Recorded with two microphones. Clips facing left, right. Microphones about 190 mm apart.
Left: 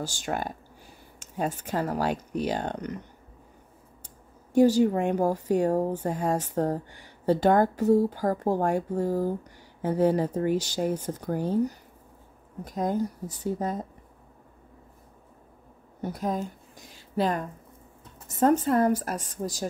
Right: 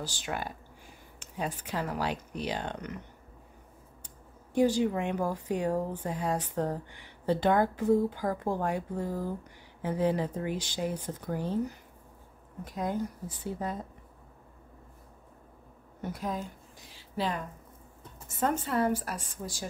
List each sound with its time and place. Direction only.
0.0 s a woman's voice: 45° left (ahead or behind)
4.6 s a woman's voice: 45° left (ahead or behind)
16.0 s a woman's voice: 40° left (ahead or behind)